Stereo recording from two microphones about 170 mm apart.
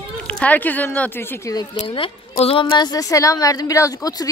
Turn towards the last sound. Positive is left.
turn(degrees=20)  # may be behind; listen again after turning